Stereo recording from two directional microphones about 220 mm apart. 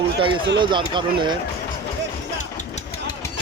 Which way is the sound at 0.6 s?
20° right (ahead or behind).